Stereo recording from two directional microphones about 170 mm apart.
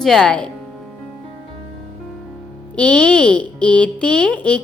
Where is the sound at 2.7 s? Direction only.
5° left (ahead or behind).